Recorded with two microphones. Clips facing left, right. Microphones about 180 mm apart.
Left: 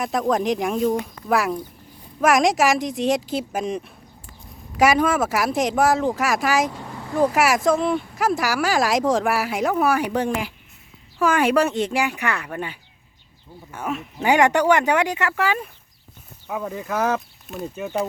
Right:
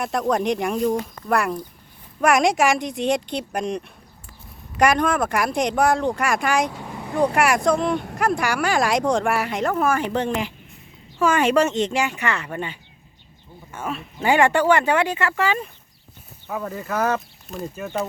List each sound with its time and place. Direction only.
0.0 s speech: centre (ahead or behind)
6.8 s vehicle: 15° right (ahead or behind)
7.2 s speech: centre (ahead or behind)
13.7 s speech: 15° left (ahead or behind)